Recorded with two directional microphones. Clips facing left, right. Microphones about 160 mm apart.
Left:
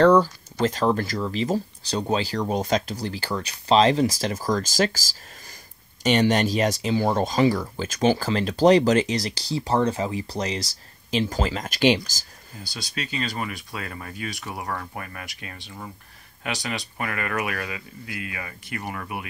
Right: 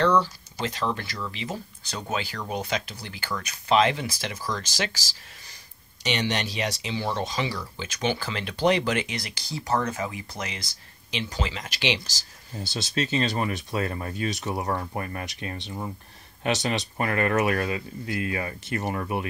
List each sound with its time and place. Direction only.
0.0 s speech: 45° left (ahead or behind)
6.0 s speech: 45° left (ahead or behind)
12.6 s speech: 25° right (ahead or behind)